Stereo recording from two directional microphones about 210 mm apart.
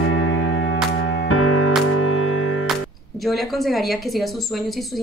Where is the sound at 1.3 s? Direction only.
90° left.